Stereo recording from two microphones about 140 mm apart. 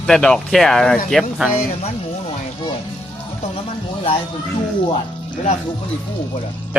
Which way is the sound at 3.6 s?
45° left (ahead or behind).